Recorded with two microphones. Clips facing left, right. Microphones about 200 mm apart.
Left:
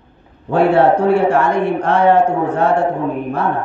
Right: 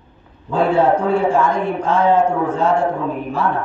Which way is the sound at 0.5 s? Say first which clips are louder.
Left 3 dB; 70° left (ahead or behind).